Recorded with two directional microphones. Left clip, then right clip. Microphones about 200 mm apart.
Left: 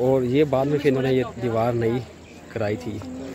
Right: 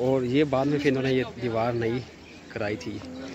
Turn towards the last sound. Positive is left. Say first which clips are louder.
# left 4 dB
turn(degrees=5)  # may be behind; listen again after turning